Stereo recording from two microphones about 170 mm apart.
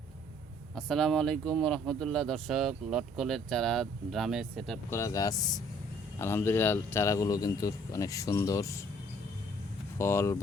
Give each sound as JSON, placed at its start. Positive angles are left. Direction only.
{"t": 0.8, "sound": "speech", "side_deg": 0}
{"t": 4.9, "sound": "a man's voice", "side_deg": 15}
{"t": 10.0, "sound": "speech", "side_deg": 15}